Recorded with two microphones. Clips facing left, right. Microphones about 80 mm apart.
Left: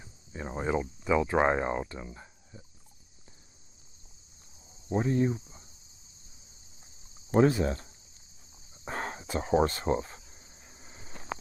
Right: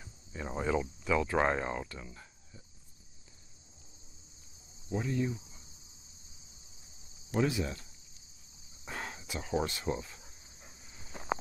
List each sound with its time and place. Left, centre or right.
0.3 s speech: left
4.8 s cricket: left
7.2 s speech: left
8.8 s a sound: left